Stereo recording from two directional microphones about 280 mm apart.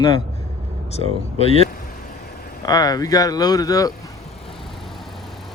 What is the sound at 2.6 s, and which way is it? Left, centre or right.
Speech, centre.